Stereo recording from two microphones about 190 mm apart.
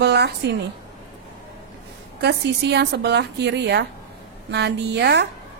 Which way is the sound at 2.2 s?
60° right (ahead or behind).